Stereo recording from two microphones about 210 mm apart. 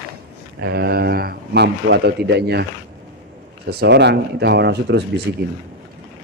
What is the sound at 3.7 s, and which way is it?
A man's voice, 50° right (ahead or behind).